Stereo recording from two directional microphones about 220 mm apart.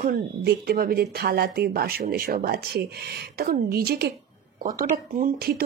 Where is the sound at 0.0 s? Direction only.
45° right (ahead or behind).